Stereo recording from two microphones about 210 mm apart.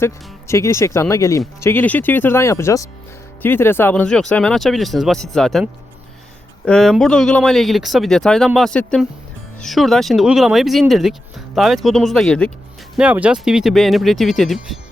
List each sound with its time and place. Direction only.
0.0 s speech: 15° left (ahead or behind)
6.7 s speech: centre (ahead or behind)